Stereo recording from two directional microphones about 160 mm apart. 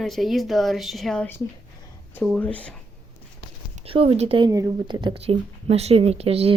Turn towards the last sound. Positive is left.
turn(degrees=-40)  # may be behind; listen again after turning